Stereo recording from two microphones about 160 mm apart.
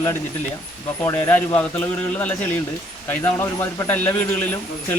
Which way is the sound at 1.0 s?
15° left (ahead or behind).